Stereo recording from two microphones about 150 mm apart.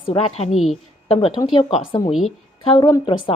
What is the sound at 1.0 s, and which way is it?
Speech, 40° left (ahead or behind).